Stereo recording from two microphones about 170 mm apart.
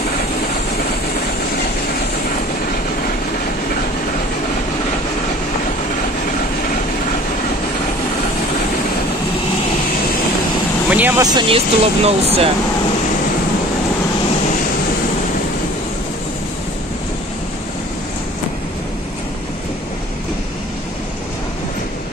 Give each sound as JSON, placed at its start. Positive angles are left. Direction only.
{"t": 10.9, "sound": "speech", "side_deg": -10}
{"t": 11.3, "sound": "speech", "side_deg": -35}